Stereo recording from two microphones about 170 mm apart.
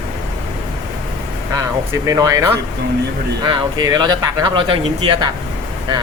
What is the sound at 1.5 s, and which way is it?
Speech, 20° right (ahead or behind).